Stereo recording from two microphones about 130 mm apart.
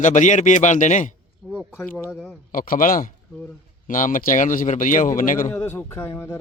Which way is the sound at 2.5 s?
90° left.